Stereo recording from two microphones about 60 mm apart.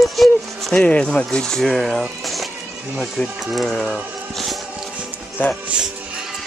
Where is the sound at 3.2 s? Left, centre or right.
Left.